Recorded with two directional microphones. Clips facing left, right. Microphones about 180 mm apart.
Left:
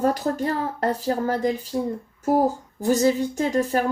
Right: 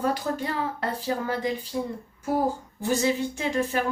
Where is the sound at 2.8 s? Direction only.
40° left (ahead or behind).